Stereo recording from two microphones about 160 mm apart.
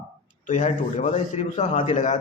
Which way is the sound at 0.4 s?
55° left (ahead or behind).